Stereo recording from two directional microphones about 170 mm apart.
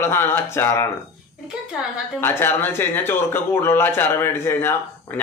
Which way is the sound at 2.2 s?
15° left (ahead or behind).